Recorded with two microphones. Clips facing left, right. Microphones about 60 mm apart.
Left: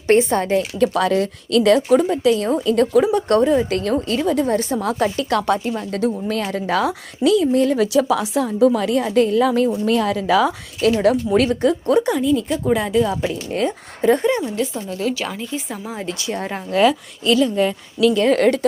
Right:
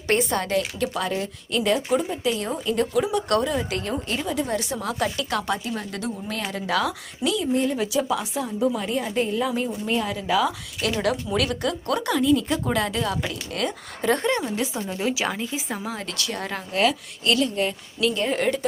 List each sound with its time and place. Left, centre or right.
0.1 s speech: left
0.8 s speech: left
3.7 s speech: left
5.3 s a woman's voice: left
9.8 s a woman's voice: left
10.9 s speech: left
12.1 s a woman's voice: centre
13.1 s speech: left
14.1 s a woman's voice: centre
14.4 s speech: centre
14.8 s speech: centre
15.1 s a woman's voice: centre
15.9 s speech: centre
18.2 s a woman's voice: left